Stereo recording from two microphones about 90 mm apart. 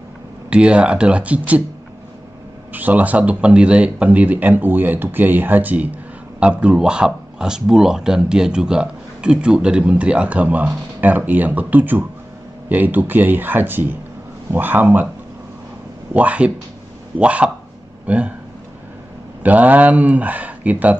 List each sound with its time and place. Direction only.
0.5 s speech: 10° right (ahead or behind)
2.7 s speech: 20° right (ahead or behind)
16.1 s speech: 15° right (ahead or behind)
19.4 s speech: 20° right (ahead or behind)